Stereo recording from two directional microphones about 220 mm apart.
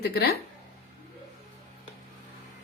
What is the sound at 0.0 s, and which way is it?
Speech, 45° left (ahead or behind).